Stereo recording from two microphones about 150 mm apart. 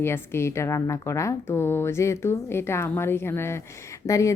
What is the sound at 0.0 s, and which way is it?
A woman's voice, 15° left (ahead or behind).